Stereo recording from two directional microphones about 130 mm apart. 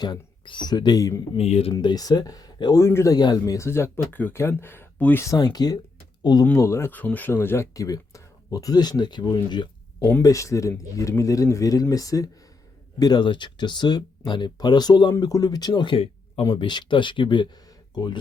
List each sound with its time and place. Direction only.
0.0 s speech: 35° left (ahead or behind)
1.4 s speech: 50° left (ahead or behind)
1.8 s speech: 30° left (ahead or behind); by 5.2 s 15° left (ahead or behind)
5.2 s speech: 30° left (ahead or behind)
6.4 s speech: 20° left (ahead or behind)